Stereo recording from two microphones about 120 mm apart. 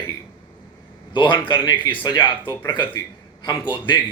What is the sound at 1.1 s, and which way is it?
A man's voice, 40° left (ahead or behind).